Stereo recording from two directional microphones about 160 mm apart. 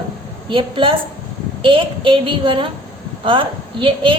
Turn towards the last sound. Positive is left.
turn(degrees=-30)  # may be behind; listen again after turning